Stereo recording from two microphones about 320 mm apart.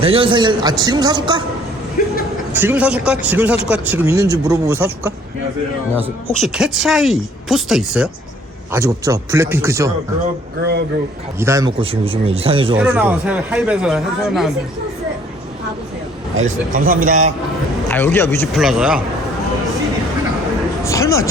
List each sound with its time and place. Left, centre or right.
0.0 s speech: centre
2.5 s speech: centre
10.6 s speech: right
11.3 s speech: centre
12.7 s speech: centre
16.4 s speech: right
17.9 s speech: centre
20.8 s a sound: centre